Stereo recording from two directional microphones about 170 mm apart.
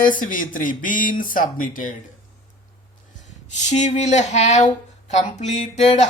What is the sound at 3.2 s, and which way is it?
Speech, 45° left (ahead or behind).